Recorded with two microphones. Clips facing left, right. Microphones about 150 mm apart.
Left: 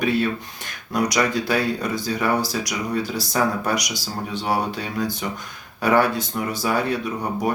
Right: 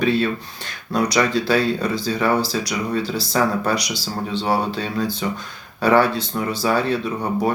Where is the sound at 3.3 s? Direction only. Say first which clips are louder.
Right 2 dB; 15° left (ahead or behind).